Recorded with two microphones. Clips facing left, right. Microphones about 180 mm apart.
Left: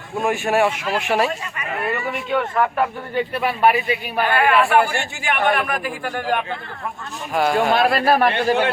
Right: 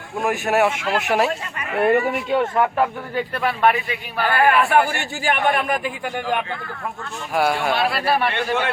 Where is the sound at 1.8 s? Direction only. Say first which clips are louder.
Right 9 dB; 50° right (ahead or behind).